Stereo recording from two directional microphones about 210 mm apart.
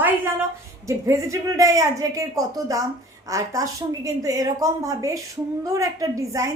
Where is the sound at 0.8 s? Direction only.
15° right (ahead or behind).